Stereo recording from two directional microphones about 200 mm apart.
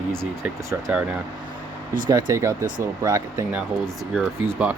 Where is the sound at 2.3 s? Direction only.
15° right (ahead or behind).